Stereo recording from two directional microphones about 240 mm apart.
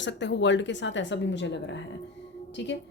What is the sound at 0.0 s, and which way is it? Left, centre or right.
Speech, left.